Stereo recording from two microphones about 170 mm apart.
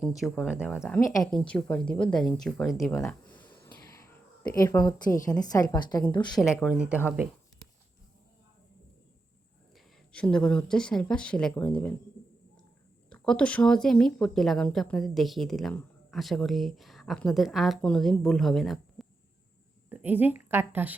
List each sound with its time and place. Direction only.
0.2 s a woman's voice: centre (ahead or behind)
3.0 s a sound: 10° left (ahead or behind)
4.5 s a woman's voice: 20° left (ahead or behind)
6.6 s speech: 5° right (ahead or behind)
9.7 s speech: 5° left (ahead or behind)
13.1 s a woman's voice: 5° left (ahead or behind); by 20.9 s 10° right (ahead or behind)